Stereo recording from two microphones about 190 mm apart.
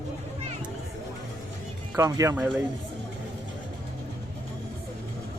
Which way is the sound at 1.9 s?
15° right (ahead or behind).